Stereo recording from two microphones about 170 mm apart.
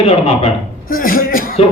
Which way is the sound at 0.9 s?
55° left (ahead or behind).